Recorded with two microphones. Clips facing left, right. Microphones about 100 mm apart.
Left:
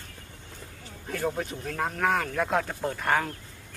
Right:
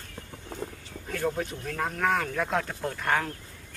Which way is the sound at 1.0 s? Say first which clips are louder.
Even; 5° left (ahead or behind).